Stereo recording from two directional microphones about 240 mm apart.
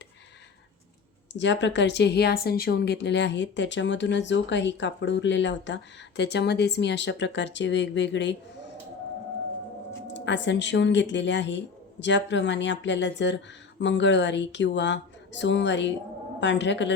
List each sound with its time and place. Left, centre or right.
1.3 s a woman's voice: left
10.2 s a woman's voice: left